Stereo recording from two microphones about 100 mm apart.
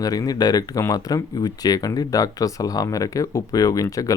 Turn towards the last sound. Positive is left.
turn(degrees=35)  # may be behind; listen again after turning